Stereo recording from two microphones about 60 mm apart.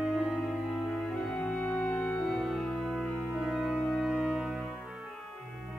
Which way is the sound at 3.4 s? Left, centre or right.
Centre.